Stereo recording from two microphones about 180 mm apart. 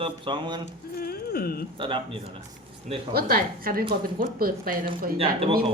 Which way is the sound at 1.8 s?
30° right (ahead or behind).